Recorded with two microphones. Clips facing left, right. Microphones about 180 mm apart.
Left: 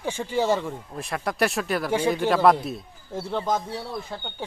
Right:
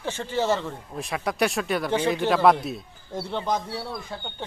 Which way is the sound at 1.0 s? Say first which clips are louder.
Even; centre (ahead or behind).